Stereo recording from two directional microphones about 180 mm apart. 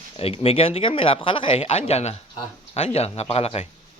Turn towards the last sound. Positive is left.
turn(degrees=35)  # may be behind; listen again after turning